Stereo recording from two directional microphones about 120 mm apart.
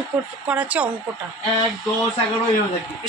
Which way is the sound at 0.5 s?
10° right (ahead or behind).